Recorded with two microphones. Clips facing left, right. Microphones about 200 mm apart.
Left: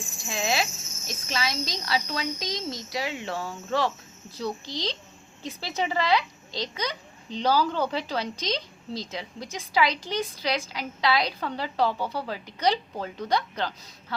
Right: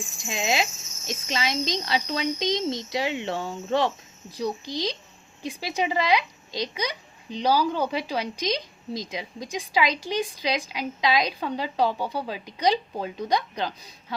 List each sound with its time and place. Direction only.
0.3 s speech: 20° right (ahead or behind)